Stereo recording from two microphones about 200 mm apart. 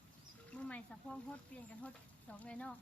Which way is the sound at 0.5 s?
5° left (ahead or behind).